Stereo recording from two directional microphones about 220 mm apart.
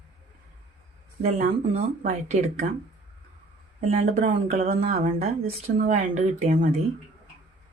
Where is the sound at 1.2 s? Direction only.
30° right (ahead or behind).